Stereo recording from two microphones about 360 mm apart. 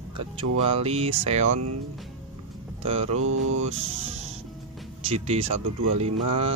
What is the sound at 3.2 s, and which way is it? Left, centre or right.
Mantra, right.